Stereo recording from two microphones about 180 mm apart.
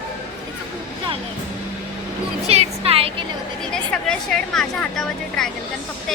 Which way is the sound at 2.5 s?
35° right (ahead or behind).